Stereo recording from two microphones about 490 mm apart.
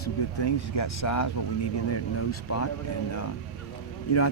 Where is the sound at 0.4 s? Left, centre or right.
Left.